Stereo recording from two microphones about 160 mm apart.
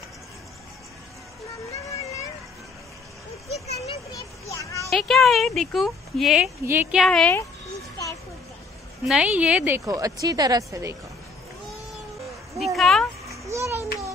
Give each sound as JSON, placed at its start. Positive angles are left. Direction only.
{"t": 4.1, "sound": "a sound", "side_deg": 20}
{"t": 4.8, "sound": "speech", "side_deg": 0}
{"t": 6.6, "sound": "a woman's voice", "side_deg": -15}
{"t": 9.0, "sound": "a woman's voice", "side_deg": -5}
{"t": 9.8, "sound": "a woman's voice", "side_deg": -20}
{"t": 12.5, "sound": "a sound", "side_deg": 0}
{"t": 13.3, "sound": "children playing", "side_deg": -20}